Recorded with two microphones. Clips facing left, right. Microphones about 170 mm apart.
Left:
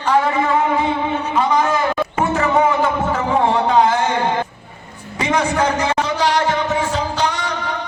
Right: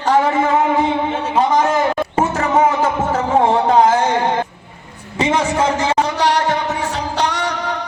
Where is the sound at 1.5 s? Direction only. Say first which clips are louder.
Right 2 dB; 40° right (ahead or behind).